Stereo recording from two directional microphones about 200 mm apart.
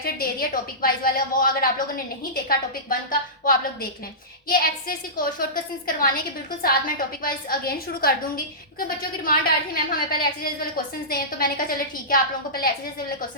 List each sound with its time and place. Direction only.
0.0 s a woman's voice: 45° left (ahead or behind)
3.1 s a woman's voice: 45° left (ahead or behind)